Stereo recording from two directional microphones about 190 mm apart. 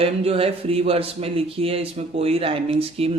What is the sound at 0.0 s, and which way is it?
Speech, 30° right (ahead or behind).